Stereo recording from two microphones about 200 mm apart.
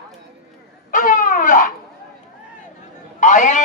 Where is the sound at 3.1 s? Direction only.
40° left (ahead or behind).